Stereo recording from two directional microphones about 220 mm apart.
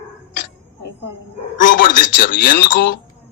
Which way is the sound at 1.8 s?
40° left (ahead or behind).